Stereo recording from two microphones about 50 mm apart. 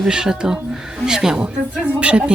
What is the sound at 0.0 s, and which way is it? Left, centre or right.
Speech, centre.